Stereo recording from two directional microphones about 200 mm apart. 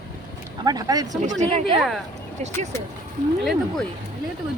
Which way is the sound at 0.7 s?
20° right (ahead or behind).